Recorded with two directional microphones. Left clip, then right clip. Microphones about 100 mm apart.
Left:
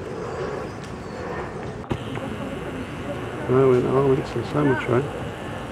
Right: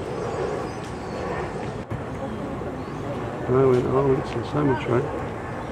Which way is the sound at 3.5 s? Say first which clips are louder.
Left 1 dB; 5° left (ahead or behind).